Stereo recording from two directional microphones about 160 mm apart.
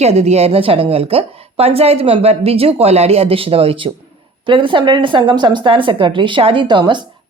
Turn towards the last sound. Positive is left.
turn(degrees=-30)  # may be behind; listen again after turning